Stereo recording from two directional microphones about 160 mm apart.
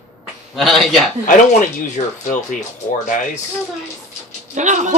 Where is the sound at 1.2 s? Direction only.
50° left (ahead or behind).